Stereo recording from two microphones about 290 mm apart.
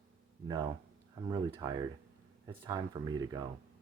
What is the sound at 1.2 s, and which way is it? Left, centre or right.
Speech, centre.